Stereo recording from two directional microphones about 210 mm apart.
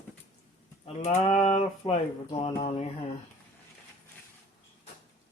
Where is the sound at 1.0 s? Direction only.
30° left (ahead or behind).